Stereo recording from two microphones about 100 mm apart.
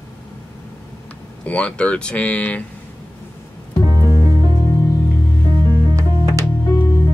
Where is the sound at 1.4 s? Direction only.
10° left (ahead or behind).